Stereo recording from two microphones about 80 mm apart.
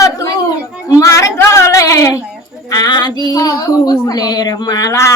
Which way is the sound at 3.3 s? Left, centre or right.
Left.